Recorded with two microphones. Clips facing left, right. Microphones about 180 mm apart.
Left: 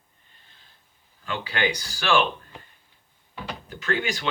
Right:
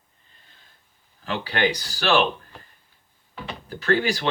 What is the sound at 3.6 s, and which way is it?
Speech, 35° right (ahead or behind).